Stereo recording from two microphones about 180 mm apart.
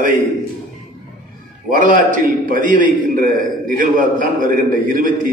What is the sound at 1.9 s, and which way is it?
A man's voice, 50° right (ahead or behind).